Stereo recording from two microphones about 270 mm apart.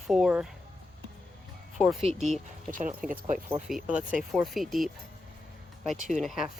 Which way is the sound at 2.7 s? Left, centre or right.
Right.